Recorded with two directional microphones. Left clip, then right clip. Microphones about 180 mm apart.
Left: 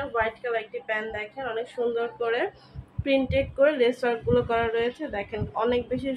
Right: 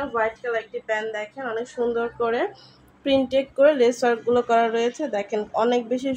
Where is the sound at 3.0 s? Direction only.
60° right (ahead or behind).